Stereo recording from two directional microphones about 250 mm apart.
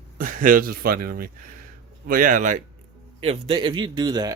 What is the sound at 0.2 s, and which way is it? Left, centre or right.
Speech, right.